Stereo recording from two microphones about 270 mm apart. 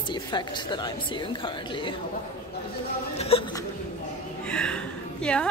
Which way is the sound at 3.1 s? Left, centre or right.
Left.